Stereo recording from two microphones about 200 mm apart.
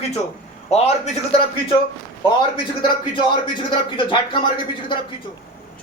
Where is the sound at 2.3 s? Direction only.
25° left (ahead or behind).